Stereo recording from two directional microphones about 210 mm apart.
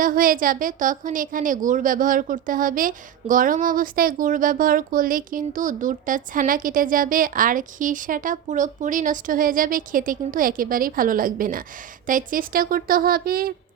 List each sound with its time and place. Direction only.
0.0 s a woman's voice: 40° right (ahead or behind)